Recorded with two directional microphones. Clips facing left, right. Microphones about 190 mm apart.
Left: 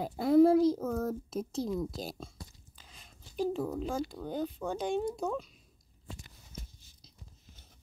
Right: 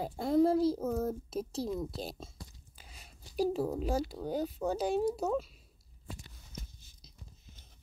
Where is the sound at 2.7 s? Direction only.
10° right (ahead or behind).